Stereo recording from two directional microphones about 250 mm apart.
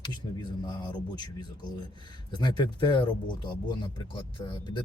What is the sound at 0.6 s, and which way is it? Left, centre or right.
Speech, centre.